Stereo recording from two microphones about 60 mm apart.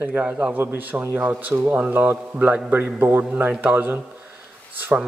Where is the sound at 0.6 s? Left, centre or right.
Right.